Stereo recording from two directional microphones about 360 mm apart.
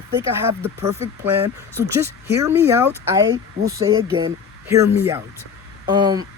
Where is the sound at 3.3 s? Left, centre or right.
Right.